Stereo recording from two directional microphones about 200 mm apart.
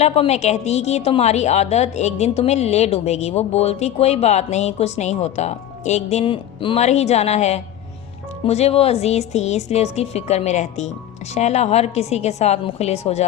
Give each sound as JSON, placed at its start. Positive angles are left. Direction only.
{"t": 0.0, "sound": "a woman's voice", "side_deg": 30}